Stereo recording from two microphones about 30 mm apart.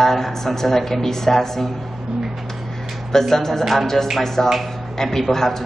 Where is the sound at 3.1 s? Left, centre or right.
Centre.